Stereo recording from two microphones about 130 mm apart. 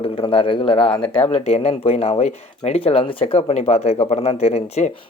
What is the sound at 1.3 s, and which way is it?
Speech, 55° left (ahead or behind).